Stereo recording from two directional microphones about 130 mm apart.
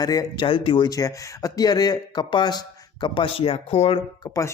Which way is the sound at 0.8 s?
25° left (ahead or behind).